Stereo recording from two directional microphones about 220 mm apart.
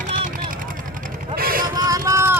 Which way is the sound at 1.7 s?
15° right (ahead or behind).